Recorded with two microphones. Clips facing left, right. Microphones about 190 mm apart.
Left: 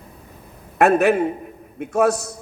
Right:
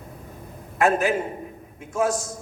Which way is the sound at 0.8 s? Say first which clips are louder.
Left 6 dB; 65° left (ahead or behind).